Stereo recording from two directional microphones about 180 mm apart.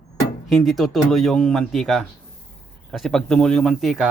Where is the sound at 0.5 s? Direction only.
Centre (ahead or behind).